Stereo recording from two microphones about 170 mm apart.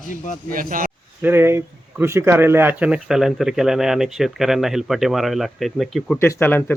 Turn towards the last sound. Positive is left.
turn(degrees=10)  # may be behind; listen again after turning